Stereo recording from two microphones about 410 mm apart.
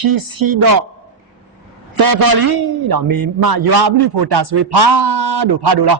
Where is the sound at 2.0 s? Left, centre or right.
Right.